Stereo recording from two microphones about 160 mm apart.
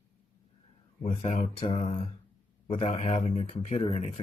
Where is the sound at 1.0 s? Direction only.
45° left (ahead or behind).